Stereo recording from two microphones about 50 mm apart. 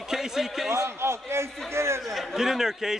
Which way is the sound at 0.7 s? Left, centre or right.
Right.